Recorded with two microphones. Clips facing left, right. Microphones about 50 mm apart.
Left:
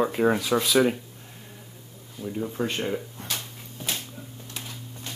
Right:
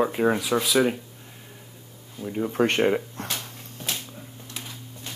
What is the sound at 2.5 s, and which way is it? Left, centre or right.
Speech, right.